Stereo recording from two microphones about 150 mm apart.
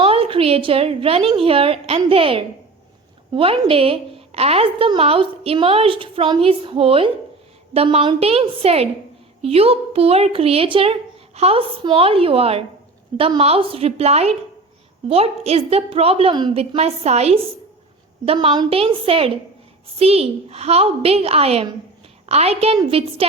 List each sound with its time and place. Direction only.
0.0 s a woman's voice: 40° right (ahead or behind)
18.3 s a woman's voice: 35° right (ahead or behind)